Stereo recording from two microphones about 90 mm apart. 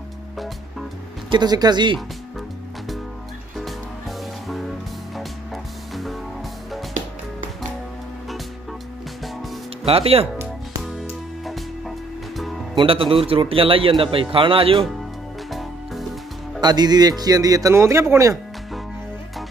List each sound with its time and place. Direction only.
1.3 s speech: 50° right (ahead or behind)
4.5 s music: centre (ahead or behind)
9.8 s a man's voice: 90° right
10.8 s music: centre (ahead or behind)
12.7 s a man's voice: 85° right
15.5 s music: centre (ahead or behind)
16.6 s speech: 50° right (ahead or behind); by 18.4 s 35° right (ahead or behind)